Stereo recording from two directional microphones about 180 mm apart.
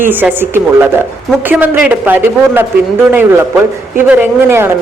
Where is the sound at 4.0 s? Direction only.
10° right (ahead or behind).